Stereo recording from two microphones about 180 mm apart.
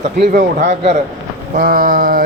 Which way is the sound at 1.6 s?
50° right (ahead or behind).